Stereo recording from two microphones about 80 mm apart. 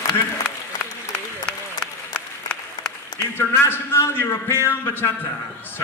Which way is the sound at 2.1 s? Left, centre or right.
Centre.